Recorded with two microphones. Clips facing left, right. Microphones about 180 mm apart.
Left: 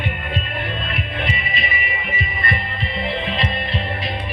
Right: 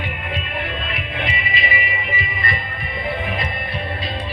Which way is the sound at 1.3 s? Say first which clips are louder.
Right 1 dB; 50° left (ahead or behind).